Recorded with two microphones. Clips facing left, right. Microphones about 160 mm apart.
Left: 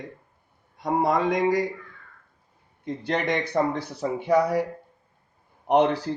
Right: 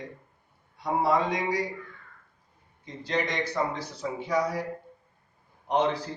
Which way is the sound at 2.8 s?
55° left (ahead or behind).